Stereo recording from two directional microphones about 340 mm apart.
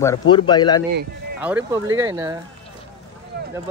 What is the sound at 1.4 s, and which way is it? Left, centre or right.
Speech, centre.